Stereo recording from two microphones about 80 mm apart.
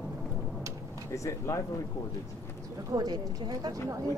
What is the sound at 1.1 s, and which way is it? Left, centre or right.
Speech, left.